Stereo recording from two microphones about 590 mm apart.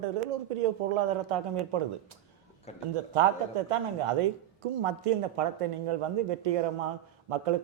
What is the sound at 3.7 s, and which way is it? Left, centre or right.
A man's voice, right.